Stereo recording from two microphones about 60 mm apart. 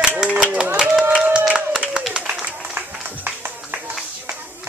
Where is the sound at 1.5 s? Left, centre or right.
Centre.